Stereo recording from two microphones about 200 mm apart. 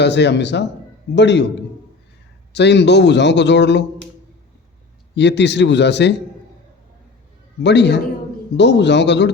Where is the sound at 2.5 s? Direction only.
60° left (ahead or behind).